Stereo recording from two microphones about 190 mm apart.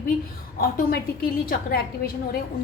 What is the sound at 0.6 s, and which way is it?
A woman's voice, 50° left (ahead or behind).